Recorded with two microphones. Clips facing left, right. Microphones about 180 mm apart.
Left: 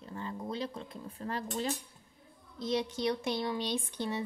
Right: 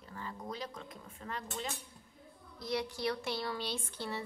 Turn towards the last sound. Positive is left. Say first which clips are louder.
# left 5 dB
turn(degrees=20)  # may be behind; listen again after turning